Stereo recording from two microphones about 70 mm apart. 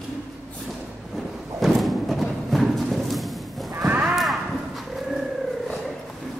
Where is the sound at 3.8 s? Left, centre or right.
Right.